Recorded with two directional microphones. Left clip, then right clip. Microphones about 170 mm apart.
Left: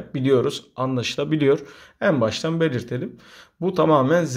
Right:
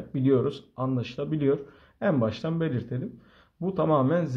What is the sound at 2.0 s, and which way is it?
A man's voice, 20° left (ahead or behind).